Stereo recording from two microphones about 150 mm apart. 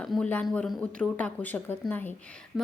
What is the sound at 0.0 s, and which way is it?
A woman's voice, 5° left (ahead or behind).